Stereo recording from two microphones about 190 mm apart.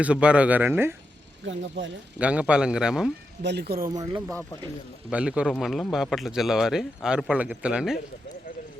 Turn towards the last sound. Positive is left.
turn(degrees=-5)  # may be behind; listen again after turning